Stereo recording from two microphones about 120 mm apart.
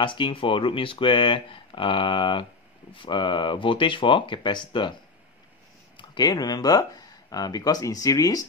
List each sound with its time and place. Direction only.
0.0 s speech: 40° left (ahead or behind)
5.9 s speech: 35° left (ahead or behind)